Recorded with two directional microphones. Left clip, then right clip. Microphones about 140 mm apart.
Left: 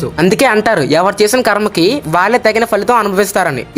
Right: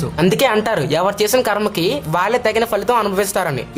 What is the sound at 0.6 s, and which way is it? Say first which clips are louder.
A woman's voice: left 6 dB; 35° left (ahead or behind).